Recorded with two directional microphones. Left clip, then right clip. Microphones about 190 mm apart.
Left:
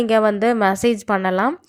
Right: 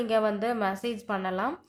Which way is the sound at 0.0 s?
40° left (ahead or behind).